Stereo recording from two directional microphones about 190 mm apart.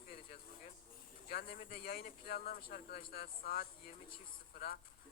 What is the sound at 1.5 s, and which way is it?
Speech, 50° left (ahead or behind).